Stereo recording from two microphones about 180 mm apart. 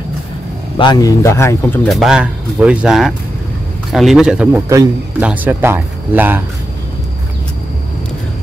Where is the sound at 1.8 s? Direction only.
Centre (ahead or behind).